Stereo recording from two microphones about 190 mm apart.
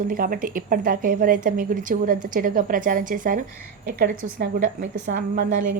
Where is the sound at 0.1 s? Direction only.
50° right (ahead or behind).